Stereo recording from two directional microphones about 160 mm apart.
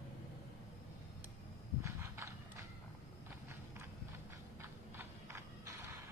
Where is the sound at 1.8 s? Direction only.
15° right (ahead or behind).